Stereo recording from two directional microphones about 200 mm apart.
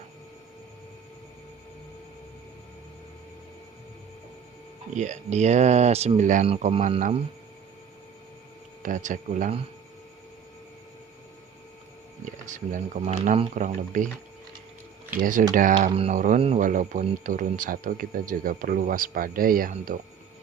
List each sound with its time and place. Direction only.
4.9 s speech: 35° right (ahead or behind)
8.8 s speech: 40° right (ahead or behind)
12.5 s speech: 40° right (ahead or behind)
15.2 s speech: 40° right (ahead or behind)